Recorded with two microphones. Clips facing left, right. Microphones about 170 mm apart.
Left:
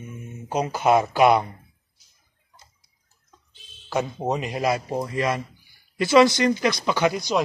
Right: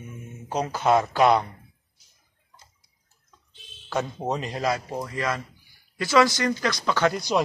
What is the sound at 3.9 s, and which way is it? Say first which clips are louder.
Speech: left 2 dB; 10° left (ahead or behind).